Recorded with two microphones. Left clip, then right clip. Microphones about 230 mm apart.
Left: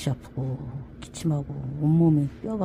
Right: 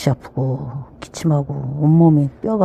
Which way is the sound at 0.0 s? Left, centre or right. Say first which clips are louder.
Right 12 dB; centre.